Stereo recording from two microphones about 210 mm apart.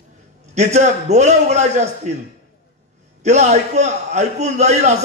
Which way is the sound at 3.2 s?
35° right (ahead or behind).